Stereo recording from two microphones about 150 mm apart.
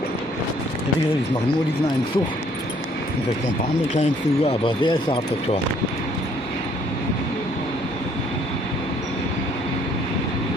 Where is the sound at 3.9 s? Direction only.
45° left (ahead or behind); by 5.2 s 30° left (ahead or behind).